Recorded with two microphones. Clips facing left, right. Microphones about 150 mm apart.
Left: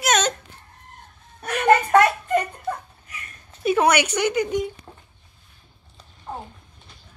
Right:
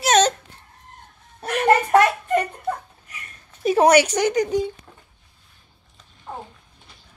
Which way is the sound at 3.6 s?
35° right (ahead or behind).